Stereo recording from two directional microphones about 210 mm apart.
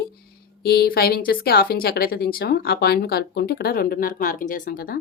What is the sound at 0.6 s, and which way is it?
Speech, 50° left (ahead or behind).